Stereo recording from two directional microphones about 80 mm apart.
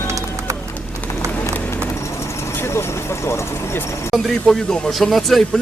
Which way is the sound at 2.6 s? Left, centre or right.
Left.